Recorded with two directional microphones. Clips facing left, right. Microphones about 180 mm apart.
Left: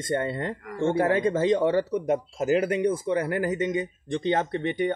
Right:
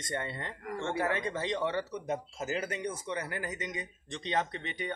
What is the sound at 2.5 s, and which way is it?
Speech, 50° left (ahead or behind).